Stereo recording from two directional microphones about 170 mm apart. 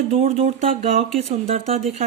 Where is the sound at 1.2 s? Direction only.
40° right (ahead or behind).